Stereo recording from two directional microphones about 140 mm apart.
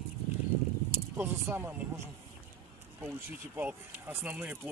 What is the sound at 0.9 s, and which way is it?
Speech, 15° right (ahead or behind).